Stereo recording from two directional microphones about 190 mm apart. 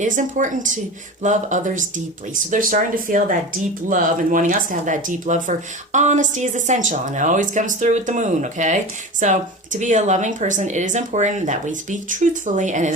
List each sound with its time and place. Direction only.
0.0 s speech: 40° right (ahead or behind)